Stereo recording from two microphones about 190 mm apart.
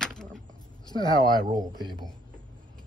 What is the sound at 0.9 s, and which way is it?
Speech, 25° left (ahead or behind).